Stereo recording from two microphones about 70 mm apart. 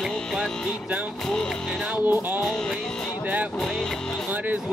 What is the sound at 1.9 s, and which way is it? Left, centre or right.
Music, right.